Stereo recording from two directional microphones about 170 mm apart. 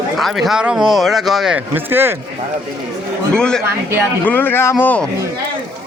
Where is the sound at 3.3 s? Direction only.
5° left (ahead or behind).